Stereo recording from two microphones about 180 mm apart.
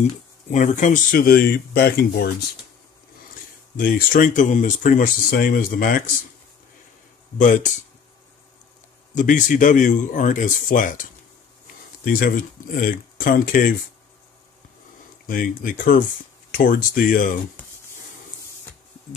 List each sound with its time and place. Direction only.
0.5 s speech: 40° left (ahead or behind); by 2.3 s 60° left (ahead or behind)
3.7 s speech: 50° left (ahead or behind)
7.3 s speech: 45° left (ahead or behind)
9.1 s speech: 45° left (ahead or behind)
15.2 s speech: 50° left (ahead or behind)